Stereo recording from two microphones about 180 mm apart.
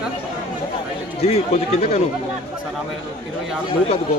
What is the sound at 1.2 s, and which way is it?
Speech, 35° left (ahead or behind).